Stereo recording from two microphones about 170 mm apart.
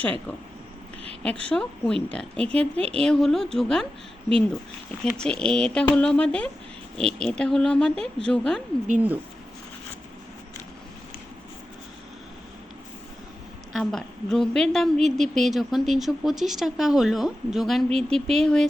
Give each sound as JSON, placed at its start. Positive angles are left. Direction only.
{"t": 0.0, "sound": "a woman's voice", "side_deg": 10}
{"t": 2.6, "sound": "a woman's voice", "side_deg": -35}
{"t": 3.0, "sound": "speech", "side_deg": 5}
{"t": 5.1, "sound": "speech", "side_deg": 5}
{"t": 13.7, "sound": "speech", "side_deg": 0}